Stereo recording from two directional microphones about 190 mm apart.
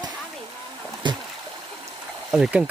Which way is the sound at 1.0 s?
25° right (ahead or behind).